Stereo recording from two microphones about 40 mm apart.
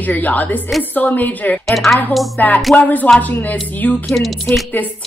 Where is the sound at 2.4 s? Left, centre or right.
Left.